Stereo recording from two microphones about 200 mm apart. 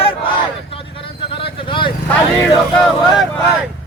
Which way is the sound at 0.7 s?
25° left (ahead or behind).